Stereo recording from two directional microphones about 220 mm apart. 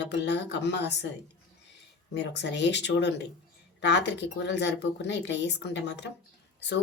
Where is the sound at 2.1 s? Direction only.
50° left (ahead or behind).